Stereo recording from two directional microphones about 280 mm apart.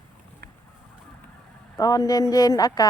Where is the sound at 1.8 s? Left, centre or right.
Centre.